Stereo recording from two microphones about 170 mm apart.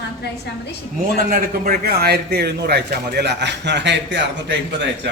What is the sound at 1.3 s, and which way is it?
A man's voice, 55° right (ahead or behind).